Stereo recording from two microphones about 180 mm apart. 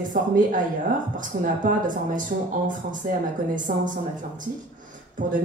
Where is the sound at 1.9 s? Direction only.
45° right (ahead or behind).